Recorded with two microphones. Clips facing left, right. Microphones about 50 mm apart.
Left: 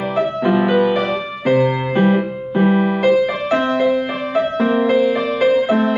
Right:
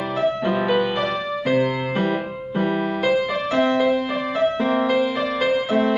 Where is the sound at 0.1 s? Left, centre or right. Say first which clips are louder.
Left 4 dB; left.